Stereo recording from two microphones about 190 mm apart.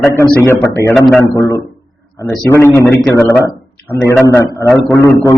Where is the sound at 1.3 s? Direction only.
15° left (ahead or behind).